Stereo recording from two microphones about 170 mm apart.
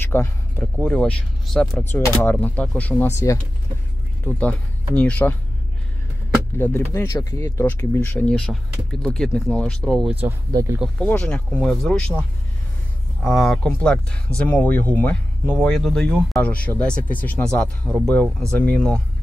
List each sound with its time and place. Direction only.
0.1 s speech: 15° left (ahead or behind)
6.6 s speech: 15° left (ahead or behind)
10.2 s speech: 15° right (ahead or behind)
11.0 s speech: 5° left (ahead or behind)